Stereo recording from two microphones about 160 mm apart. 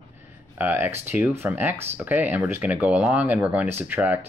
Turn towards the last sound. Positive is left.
turn(degrees=-10)  # may be behind; listen again after turning